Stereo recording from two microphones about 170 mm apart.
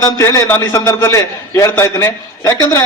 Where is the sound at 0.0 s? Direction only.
15° left (ahead or behind).